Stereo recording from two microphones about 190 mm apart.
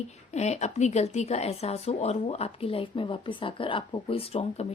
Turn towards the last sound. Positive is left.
turn(degrees=30)  # may be behind; listen again after turning